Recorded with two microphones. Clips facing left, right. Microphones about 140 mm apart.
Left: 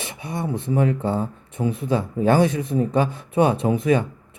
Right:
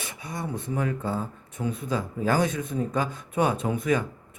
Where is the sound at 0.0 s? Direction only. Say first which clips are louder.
Left 6 dB; 25° left (ahead or behind).